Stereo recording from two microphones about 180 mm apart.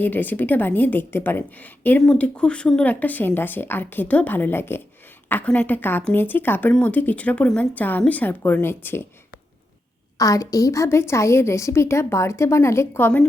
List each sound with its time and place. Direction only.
0.0 s a woman's voice: 10° left (ahead or behind)
10.2 s a woman's voice: 20° left (ahead or behind)